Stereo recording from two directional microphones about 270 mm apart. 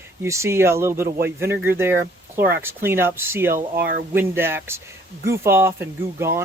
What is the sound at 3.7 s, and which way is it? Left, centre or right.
Speech, right.